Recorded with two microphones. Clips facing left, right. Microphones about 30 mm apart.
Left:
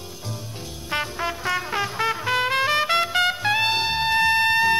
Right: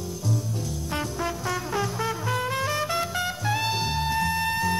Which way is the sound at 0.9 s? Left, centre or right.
Left.